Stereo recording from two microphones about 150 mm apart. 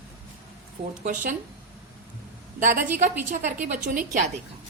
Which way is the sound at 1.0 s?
60° right (ahead or behind).